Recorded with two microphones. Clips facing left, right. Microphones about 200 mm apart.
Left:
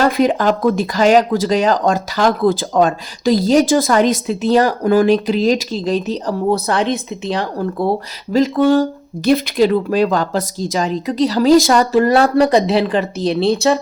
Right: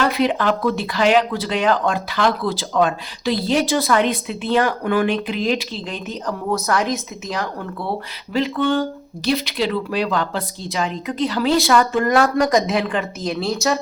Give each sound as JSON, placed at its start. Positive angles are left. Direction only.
{"t": 0.0, "sound": "speech", "side_deg": 40}